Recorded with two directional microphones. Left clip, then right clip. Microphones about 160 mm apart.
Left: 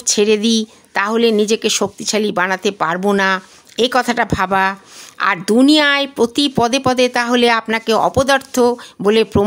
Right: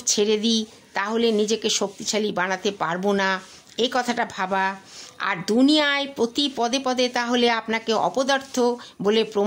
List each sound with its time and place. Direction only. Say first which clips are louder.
0.0 s speech: left 7 dB; 40° left (ahead or behind)